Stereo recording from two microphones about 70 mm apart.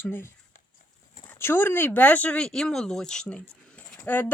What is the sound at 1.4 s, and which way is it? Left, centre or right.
Speech, left.